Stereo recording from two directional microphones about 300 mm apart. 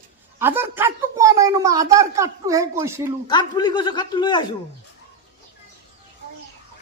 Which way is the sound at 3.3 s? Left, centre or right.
Centre.